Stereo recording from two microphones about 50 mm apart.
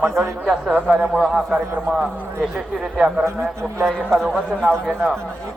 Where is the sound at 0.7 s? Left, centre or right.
Right.